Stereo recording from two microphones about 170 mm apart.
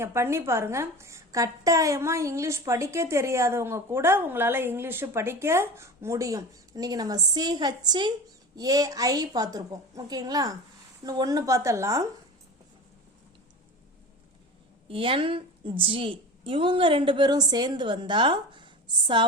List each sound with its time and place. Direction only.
0.0 s a woman's voice: 15° right (ahead or behind)
14.8 s a woman's voice: 30° right (ahead or behind)